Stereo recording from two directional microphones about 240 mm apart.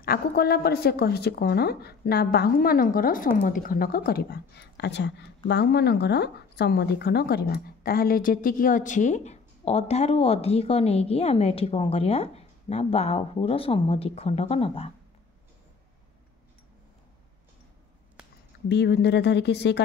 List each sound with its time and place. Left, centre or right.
0.0 s a woman's voice: left
18.7 s speech: left